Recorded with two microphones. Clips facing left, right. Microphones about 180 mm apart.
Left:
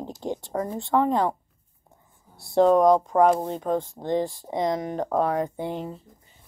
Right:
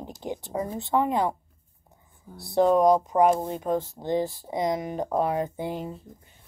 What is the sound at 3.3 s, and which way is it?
Speech, 30° left (ahead or behind).